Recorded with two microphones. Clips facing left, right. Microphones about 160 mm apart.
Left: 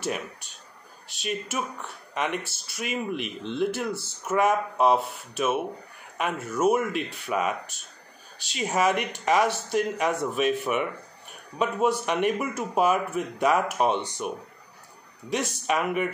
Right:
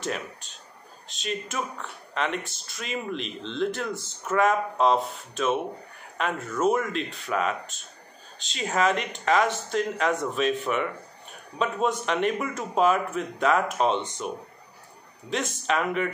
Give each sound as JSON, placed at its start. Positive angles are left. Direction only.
{"t": 1.2, "sound": "speech", "side_deg": 10}
{"t": 8.5, "sound": "speech", "side_deg": 10}
{"t": 15.2, "sound": "speech", "side_deg": 10}